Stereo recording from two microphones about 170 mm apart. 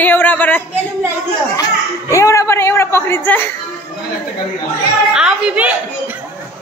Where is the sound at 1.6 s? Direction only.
20° left (ahead or behind).